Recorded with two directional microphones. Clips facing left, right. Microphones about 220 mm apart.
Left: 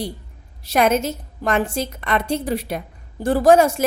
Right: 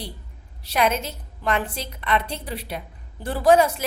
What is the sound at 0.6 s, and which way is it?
A woman's voice, 45° left (ahead or behind).